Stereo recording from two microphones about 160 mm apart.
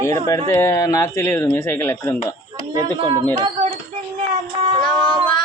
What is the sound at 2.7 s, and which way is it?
Speech, 30° right (ahead or behind).